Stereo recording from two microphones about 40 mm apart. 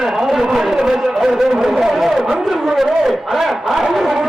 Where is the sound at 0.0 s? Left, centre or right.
Centre.